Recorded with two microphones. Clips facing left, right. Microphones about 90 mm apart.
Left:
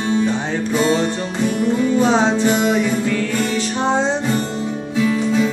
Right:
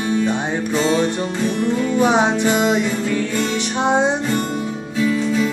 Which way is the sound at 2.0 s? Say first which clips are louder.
Right 2 dB; 15° right (ahead or behind).